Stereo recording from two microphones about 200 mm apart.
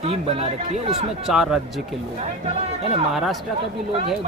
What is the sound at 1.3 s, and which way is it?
Speech, centre (ahead or behind).